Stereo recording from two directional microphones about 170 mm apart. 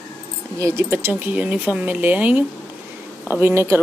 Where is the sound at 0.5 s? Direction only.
15° right (ahead or behind).